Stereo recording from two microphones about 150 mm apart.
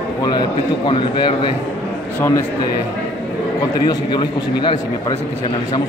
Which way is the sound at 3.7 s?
30° left (ahead or behind).